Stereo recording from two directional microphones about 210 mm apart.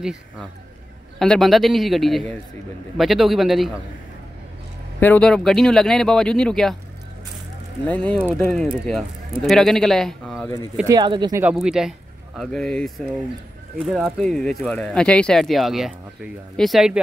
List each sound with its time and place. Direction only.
0.0 s speech: 5° right (ahead or behind)
5.0 s speech: 5° left (ahead or behind)
7.8 s speech: 5° left (ahead or behind)
10.9 s speech: 20° right (ahead or behind)
11.4 s speech: 5° right (ahead or behind)